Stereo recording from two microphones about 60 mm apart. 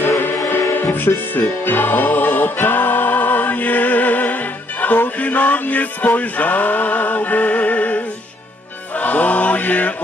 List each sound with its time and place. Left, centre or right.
0.2 s music: left
9.0 s chant: left